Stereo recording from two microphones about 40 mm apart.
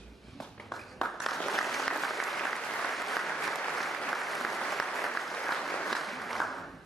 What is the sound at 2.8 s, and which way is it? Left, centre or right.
Applause, centre.